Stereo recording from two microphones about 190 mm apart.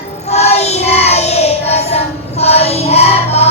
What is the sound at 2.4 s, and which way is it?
Music, 35° left (ahead or behind).